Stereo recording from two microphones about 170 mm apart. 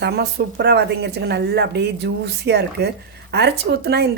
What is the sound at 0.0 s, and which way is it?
A woman's voice, 70° right (ahead or behind).